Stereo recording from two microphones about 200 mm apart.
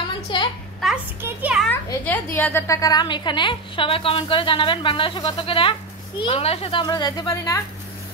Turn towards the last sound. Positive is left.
turn(degrees=15)  # may be behind; listen again after turning